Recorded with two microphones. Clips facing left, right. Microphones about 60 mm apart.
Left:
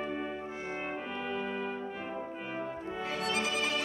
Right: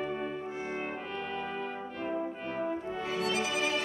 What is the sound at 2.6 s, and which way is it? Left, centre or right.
Brass instrument, centre.